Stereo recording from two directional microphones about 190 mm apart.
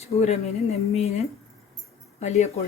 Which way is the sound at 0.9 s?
35° left (ahead or behind).